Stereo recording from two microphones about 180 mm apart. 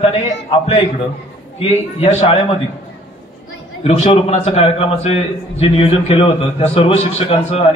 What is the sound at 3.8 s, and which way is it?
A man's voice, 35° left (ahead or behind).